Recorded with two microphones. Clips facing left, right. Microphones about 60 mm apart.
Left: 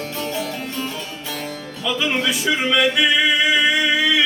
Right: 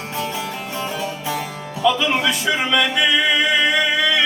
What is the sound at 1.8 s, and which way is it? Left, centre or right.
Music, centre.